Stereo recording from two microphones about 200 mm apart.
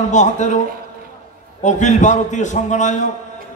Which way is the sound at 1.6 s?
35° left (ahead or behind).